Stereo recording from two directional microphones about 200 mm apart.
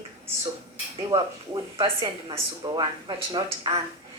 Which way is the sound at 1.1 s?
15° right (ahead or behind).